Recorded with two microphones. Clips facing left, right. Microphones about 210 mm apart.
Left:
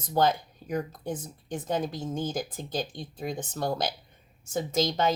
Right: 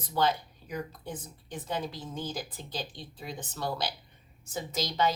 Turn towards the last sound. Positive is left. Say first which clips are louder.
# left 4 dB
turn(degrees=50)  # may be behind; listen again after turning